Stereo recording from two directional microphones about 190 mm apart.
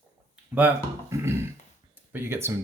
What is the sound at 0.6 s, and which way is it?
Speech, 10° right (ahead or behind).